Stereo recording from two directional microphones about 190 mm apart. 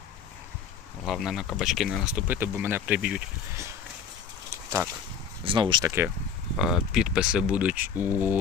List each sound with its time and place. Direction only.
1.0 s speech: centre (ahead or behind)
5.4 s speech: 25° right (ahead or behind)
6.6 s speech: centre (ahead or behind)